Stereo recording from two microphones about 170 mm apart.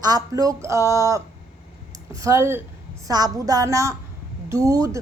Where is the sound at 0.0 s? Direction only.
20° right (ahead or behind).